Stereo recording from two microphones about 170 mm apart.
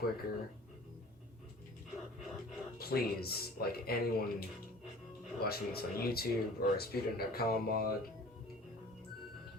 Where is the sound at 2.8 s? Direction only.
65° left (ahead or behind).